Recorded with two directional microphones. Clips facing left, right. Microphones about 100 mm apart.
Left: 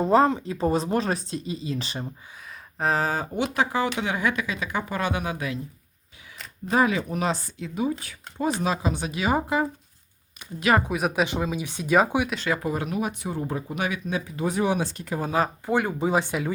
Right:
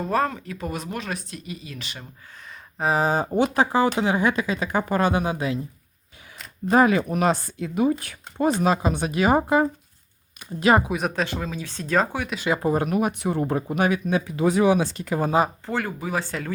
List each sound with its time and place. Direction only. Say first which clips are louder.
0.0 s speech: left 4 dB; 20° left (ahead or behind)
2.7 s speech: right 2 dB; 5° right (ahead or behind)
3.0 s speech: right 4 dB; 25° right (ahead or behind)
3.3 s speech: right 4 dB; 40° right (ahead or behind)
6.7 s speech: right 4 dB; 50° right (ahead or behind)
8.6 s speech: right 4 dB; 50° right (ahead or behind)
10.8 s speech: left 1 dB; 5° left (ahead or behind)
12.6 s speech: right 5 dB; 45° right (ahead or behind)
14.3 s speech: right 6 dB; 90° right
15.6 s speech: left 4 dB; 15° left (ahead or behind)